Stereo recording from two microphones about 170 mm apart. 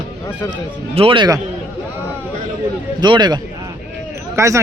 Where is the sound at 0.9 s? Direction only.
30° right (ahead or behind).